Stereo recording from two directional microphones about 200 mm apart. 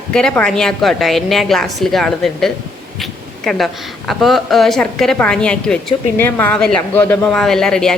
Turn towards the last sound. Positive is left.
turn(degrees=5)  # may be behind; listen again after turning